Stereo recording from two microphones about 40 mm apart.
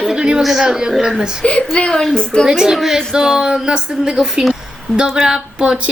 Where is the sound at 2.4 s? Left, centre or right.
Centre.